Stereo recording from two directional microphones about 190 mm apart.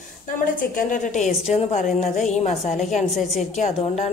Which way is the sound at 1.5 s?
35° left (ahead or behind).